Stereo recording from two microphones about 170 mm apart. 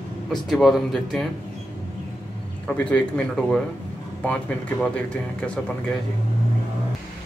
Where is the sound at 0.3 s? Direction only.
Centre (ahead or behind).